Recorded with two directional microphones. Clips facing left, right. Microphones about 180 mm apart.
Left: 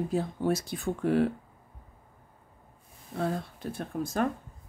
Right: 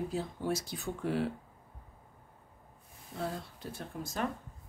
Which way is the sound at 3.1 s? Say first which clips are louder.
Left 7 dB; 55° left (ahead or behind).